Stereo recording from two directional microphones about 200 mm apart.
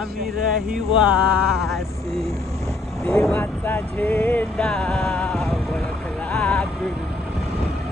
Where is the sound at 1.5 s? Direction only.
Centre (ahead or behind).